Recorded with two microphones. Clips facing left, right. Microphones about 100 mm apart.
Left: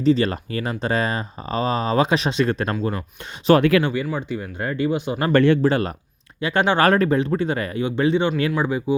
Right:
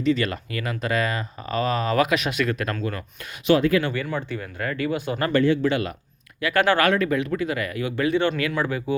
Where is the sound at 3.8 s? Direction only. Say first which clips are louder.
Left 3 dB; 20° left (ahead or behind).